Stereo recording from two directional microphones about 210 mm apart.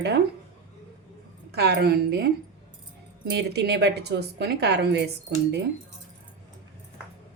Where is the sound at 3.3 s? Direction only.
50° right (ahead or behind).